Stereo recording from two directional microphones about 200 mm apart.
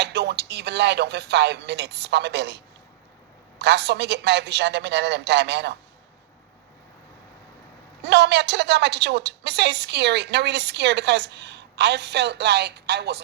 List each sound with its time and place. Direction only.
0.0 s a woman's voice: 55° right (ahead or behind)
3.6 s a woman's voice: 55° right (ahead or behind)
8.0 s a woman's voice: 55° right (ahead or behind)